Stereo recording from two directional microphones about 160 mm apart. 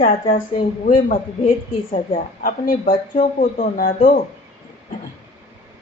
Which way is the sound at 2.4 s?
60° left (ahead or behind).